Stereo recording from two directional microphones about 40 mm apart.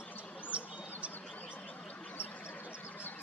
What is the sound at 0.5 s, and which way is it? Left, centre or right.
Bird, right.